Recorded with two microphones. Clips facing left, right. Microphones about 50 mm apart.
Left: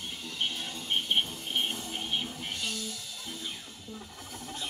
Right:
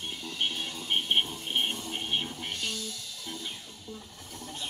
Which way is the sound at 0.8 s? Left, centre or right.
Right.